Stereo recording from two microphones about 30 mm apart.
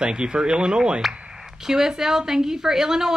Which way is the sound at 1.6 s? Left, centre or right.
Centre.